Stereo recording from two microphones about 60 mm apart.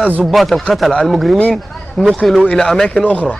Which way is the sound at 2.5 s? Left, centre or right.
Centre.